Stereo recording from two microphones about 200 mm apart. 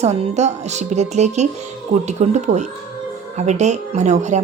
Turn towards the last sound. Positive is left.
turn(degrees=-35)  # may be behind; listen again after turning